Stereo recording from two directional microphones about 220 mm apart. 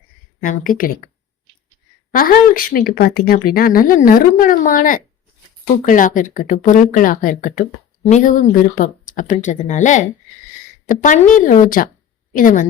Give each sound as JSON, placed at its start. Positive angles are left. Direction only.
{"t": 0.4, "sound": "speech", "side_deg": 40}
{"t": 2.1, "sound": "speech", "side_deg": 40}